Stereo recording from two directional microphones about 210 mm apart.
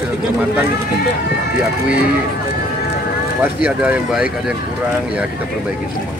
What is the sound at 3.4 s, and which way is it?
Speech, 5° right (ahead or behind).